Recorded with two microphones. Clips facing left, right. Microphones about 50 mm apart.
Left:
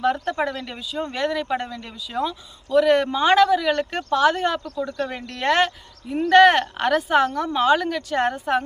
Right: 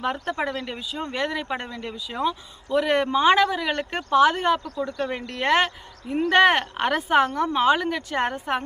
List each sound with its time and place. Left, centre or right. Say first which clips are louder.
0.0 s speech: left 4 dB; centre